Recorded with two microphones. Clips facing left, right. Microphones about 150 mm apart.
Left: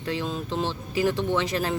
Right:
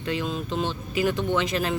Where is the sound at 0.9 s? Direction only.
35° left (ahead or behind).